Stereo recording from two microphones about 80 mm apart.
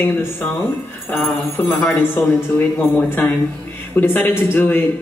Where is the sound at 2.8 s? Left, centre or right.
Left.